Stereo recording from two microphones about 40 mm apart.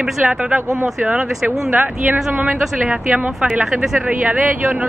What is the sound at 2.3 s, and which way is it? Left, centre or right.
A woman's voice, right.